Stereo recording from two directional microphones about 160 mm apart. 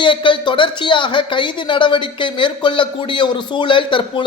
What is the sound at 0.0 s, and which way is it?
Speech, 30° left (ahead or behind).